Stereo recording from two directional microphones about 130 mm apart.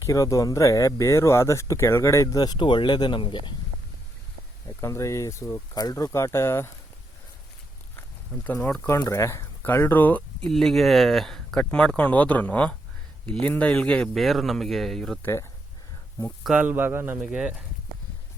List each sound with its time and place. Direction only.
0.0 s speech: 25° left (ahead or behind)
4.8 s speech: 25° left (ahead or behind)
8.3 s speech: 10° left (ahead or behind)
8.9 s speech: 20° left (ahead or behind); by 15.2 s 5° left (ahead or behind)
15.2 s speech: 20° left (ahead or behind)
16.4 s speech: 10° right (ahead or behind)